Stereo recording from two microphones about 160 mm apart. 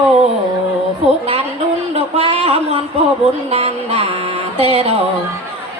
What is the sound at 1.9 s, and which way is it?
Speech, 40° right (ahead or behind).